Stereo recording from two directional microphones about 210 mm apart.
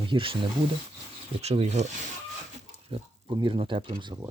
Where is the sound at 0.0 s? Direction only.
25° right (ahead or behind).